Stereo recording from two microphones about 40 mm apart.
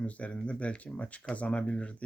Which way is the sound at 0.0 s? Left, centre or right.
Left.